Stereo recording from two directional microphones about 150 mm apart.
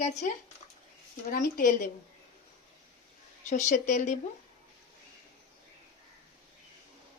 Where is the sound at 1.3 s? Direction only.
75° left (ahead or behind).